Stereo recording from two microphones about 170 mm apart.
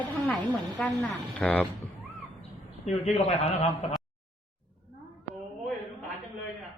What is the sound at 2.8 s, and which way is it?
A man's voice, 40° left (ahead or behind).